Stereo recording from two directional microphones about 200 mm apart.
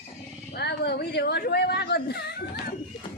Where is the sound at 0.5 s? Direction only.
55° left (ahead or behind).